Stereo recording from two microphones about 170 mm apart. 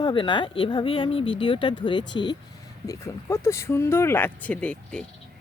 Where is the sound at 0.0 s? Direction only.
30° left (ahead or behind).